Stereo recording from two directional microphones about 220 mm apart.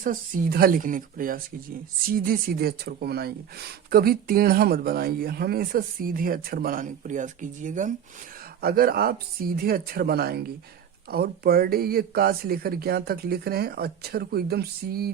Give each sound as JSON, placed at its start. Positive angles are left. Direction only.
{"t": 0.0, "sound": "speech", "side_deg": -40}